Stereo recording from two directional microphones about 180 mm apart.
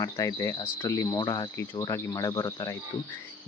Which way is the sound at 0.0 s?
20° left (ahead or behind).